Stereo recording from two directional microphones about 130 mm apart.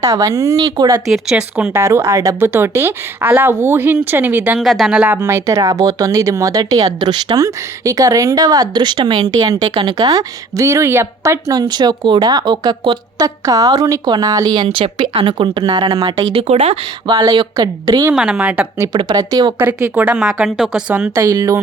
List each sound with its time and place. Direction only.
0.0 s speech: 25° right (ahead or behind)
1.0 s speech: 5° right (ahead or behind)
1.7 s speech: 20° right (ahead or behind)
4.6 s speech: centre (ahead or behind); by 16.0 s 30° right (ahead or behind)
16.3 s speech: 50° right (ahead or behind)
17.1 s speech: 30° right (ahead or behind)
18.1 s speech: 5° right (ahead or behind)
18.9 s speech: 35° right (ahead or behind)
19.5 s speech: 15° right (ahead or behind)
21.2 s speech: 25° right (ahead or behind)